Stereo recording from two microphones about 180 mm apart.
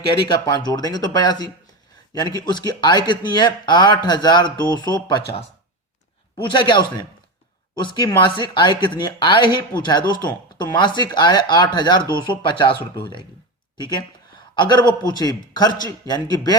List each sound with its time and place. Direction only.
0.3 s speech: 20° left (ahead or behind)
6.3 s speech: 25° left (ahead or behind)